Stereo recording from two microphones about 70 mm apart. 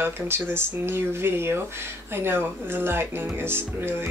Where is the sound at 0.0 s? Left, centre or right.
Right.